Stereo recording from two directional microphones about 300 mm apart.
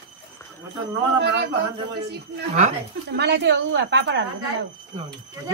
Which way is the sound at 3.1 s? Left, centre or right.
Right.